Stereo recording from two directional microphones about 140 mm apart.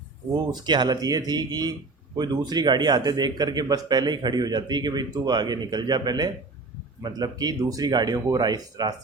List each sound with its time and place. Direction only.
0.3 s speech: 30° right (ahead or behind)